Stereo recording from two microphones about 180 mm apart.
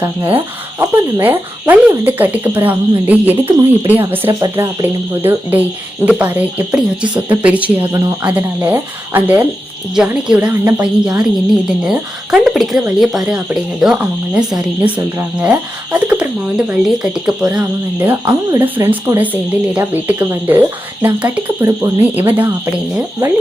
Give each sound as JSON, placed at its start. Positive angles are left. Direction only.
{"t": 0.3, "sound": "speech", "side_deg": -10}
{"t": 3.4, "sound": "speech", "side_deg": -30}
{"t": 4.3, "sound": "speech", "side_deg": -20}